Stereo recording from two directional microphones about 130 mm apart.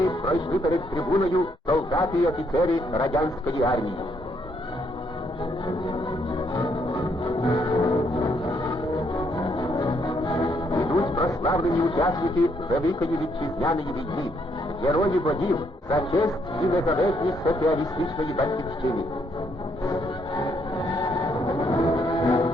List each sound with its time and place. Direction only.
0.1 s speech: 25° left (ahead or behind)
6.8 s music: 25° left (ahead or behind)
9.4 s music: 30° left (ahead or behind)
10.8 s a sound: 30° left (ahead or behind)
12.9 s speech: 25° left (ahead or behind)
14.8 s speech: 25° left (ahead or behind)
20.7 s choir: 50° left (ahead or behind)
21.3 s music: 25° left (ahead or behind)